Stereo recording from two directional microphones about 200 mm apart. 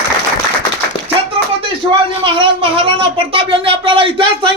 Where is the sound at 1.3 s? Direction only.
25° right (ahead or behind).